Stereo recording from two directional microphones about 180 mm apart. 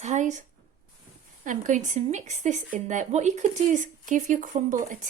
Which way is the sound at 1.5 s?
45° right (ahead or behind).